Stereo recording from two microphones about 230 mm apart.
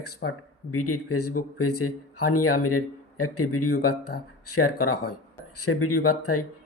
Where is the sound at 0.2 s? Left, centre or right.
Left.